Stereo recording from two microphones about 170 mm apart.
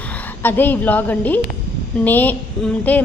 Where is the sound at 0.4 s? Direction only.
10° left (ahead or behind).